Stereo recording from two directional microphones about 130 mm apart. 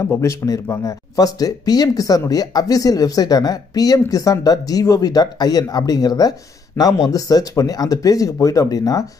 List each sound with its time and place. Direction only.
0.0 s speech: 20° left (ahead or behind)